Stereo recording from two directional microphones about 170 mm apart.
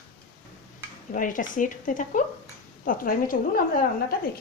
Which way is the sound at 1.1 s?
50° left (ahead or behind).